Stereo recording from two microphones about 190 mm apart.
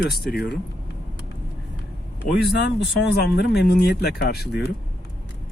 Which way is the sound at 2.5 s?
65° left (ahead or behind).